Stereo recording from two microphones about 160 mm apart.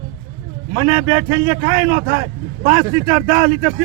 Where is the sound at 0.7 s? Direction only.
25° right (ahead or behind).